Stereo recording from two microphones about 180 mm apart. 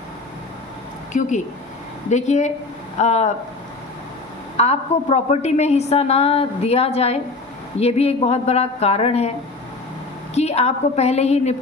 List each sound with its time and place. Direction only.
1.1 s a woman's voice: 45° left (ahead or behind)
4.6 s a woman's voice: 35° left (ahead or behind)
10.3 s a woman's voice: 35° left (ahead or behind)